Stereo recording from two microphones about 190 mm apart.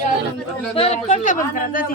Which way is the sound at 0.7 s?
35° left (ahead or behind).